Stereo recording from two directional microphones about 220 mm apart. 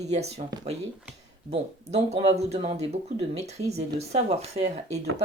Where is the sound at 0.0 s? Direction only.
30° right (ahead or behind).